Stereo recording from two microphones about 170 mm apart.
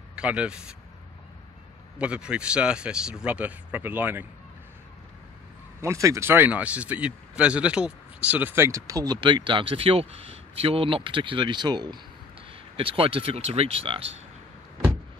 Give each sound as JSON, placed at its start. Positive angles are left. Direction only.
{"t": 0.1, "sound": "speech", "side_deg": -5}
{"t": 2.0, "sound": "a man's voice", "side_deg": -5}
{"t": 5.8, "sound": "speech", "side_deg": -15}